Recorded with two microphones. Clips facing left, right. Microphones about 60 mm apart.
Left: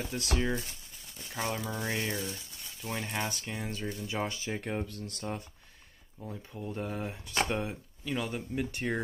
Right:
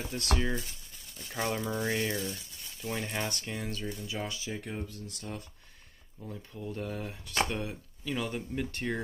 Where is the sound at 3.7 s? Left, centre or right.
Left.